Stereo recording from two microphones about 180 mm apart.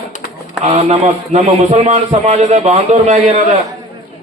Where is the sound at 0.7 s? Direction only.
35° right (ahead or behind).